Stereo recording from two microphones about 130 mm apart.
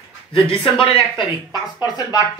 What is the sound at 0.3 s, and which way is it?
Speech, 45° left (ahead or behind).